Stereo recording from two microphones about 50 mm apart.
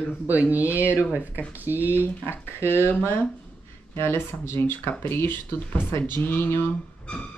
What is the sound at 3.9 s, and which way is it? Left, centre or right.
Speech, left.